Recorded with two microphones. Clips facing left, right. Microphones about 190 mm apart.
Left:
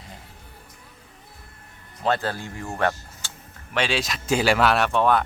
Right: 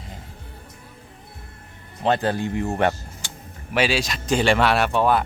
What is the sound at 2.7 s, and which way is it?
Vehicle, 15° right (ahead or behind).